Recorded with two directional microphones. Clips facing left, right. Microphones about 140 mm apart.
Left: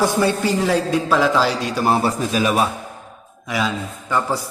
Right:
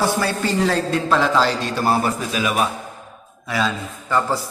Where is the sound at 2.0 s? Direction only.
35° left (ahead or behind).